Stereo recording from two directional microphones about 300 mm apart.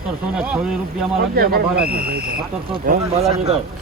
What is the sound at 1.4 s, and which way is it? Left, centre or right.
Speech, right.